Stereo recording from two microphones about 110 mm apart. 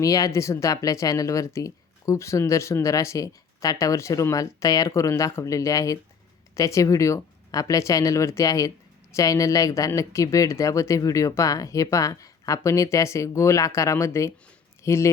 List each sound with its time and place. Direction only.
0.0 s speech: 30° left (ahead or behind)